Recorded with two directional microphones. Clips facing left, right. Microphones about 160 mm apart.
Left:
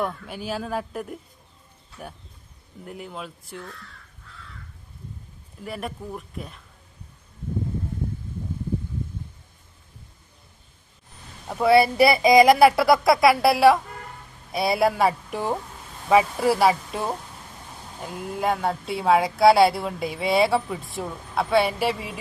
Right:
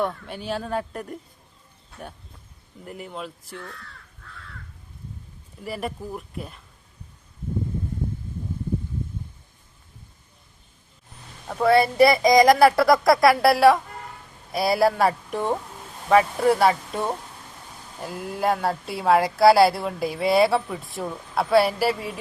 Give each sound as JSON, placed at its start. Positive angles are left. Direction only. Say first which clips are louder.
{"t": 0.0, "sound": "speech", "louder": "right 1 dB", "side_deg": 5}
{"t": 2.8, "sound": "speech", "louder": "right 1 dB", "side_deg": 0}
{"t": 5.6, "sound": "speech", "louder": "right 2 dB", "side_deg": 0}
{"t": 11.4, "sound": "speech", "louder": "left 1 dB", "side_deg": 5}